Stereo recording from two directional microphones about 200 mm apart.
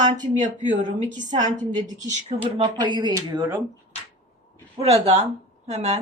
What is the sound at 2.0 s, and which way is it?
Speech, 35° right (ahead or behind).